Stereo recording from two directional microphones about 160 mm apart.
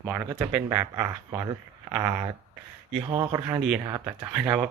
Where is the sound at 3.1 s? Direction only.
25° right (ahead or behind).